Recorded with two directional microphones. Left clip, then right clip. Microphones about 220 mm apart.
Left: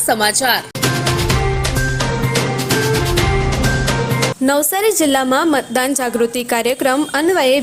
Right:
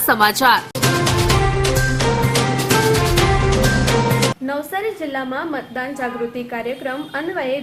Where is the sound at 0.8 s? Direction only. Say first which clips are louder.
Even; centre (ahead or behind).